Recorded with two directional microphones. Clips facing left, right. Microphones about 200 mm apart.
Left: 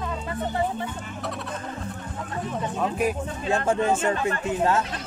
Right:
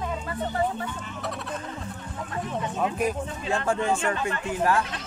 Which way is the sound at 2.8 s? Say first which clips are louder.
Left 1 dB; 5° left (ahead or behind).